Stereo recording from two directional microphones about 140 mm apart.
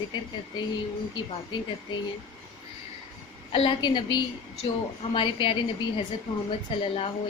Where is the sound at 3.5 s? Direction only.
40° left (ahead or behind).